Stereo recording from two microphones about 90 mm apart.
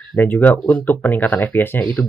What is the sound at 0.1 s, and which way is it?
Speech, 20° left (ahead or behind).